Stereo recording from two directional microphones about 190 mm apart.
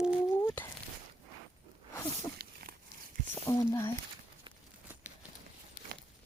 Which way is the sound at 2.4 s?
50° right (ahead or behind).